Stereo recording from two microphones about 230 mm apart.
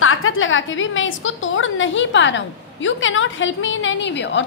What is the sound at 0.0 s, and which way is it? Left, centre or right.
A woman's voice, left.